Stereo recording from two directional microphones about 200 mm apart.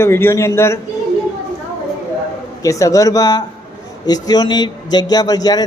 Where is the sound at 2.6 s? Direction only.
15° left (ahead or behind).